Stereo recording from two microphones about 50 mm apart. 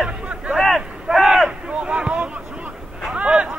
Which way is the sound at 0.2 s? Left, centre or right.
Right.